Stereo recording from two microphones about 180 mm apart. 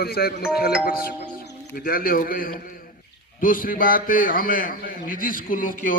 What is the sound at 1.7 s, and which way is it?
A man's voice, 55° left (ahead or behind).